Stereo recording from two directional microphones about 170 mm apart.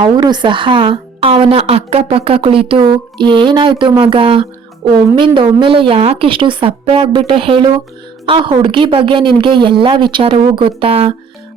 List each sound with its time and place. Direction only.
0.0 s a woman's voice: 25° right (ahead or behind)